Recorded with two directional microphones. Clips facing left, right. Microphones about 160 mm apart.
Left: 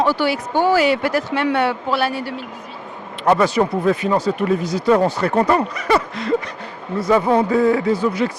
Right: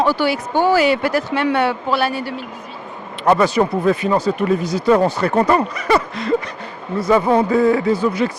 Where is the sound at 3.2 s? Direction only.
20° right (ahead or behind).